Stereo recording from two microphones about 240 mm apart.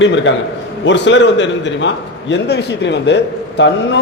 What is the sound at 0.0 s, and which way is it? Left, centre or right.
A man's voice, left.